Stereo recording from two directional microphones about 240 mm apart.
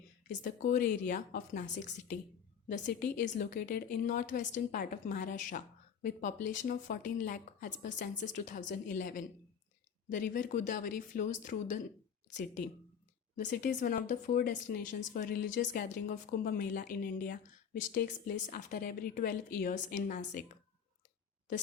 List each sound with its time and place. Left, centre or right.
0.4 s speech: left
13.3 s speech: left